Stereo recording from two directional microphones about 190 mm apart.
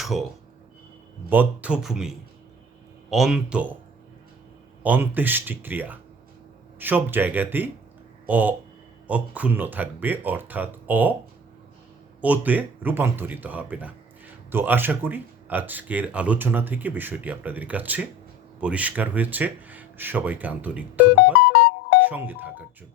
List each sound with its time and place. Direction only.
0.0 s speech: centre (ahead or behind)
1.3 s speech: 10° right (ahead or behind)
4.8 s speech: 10° right (ahead or behind)
12.2 s speech: 10° right (ahead or behind)